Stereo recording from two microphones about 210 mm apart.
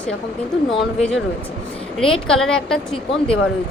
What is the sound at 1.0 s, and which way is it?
Speech, 5° left (ahead or behind).